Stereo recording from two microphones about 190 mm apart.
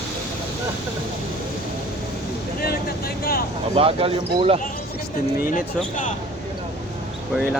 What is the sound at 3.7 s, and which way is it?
Speech, 30° right (ahead or behind).